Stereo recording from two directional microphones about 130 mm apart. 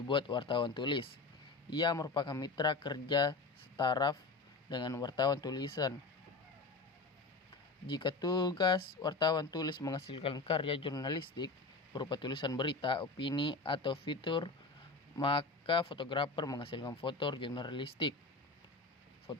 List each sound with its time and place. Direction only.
0.1 s speech: 40° left (ahead or behind)
7.9 s speech: 35° left (ahead or behind)
10.1 s speech: 50° left (ahead or behind)
19.3 s speech: 35° left (ahead or behind)